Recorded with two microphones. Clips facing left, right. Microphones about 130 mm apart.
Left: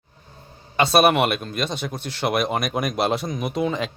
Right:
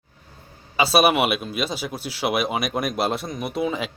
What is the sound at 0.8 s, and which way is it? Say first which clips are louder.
Speech: left 1 dB; 5° right (ahead or behind).